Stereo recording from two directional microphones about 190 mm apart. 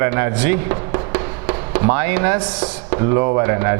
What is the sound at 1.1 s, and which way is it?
Speech, 15° right (ahead or behind).